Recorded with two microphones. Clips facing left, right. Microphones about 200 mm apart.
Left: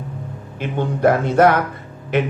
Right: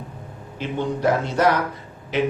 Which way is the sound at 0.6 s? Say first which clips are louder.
Left 4 dB; 55° left (ahead or behind).